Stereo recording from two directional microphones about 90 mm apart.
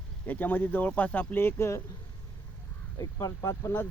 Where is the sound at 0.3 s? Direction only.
20° left (ahead or behind).